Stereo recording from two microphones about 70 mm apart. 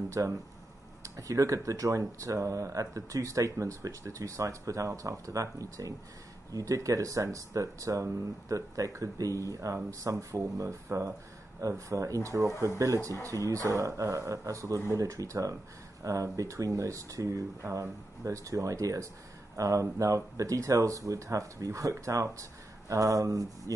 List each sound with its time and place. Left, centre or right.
0.1 s speech: right